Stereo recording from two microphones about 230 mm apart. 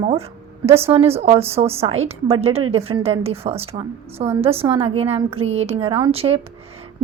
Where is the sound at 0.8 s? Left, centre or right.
Right.